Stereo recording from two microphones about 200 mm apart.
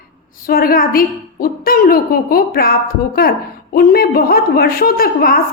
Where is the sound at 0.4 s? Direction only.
45° left (ahead or behind).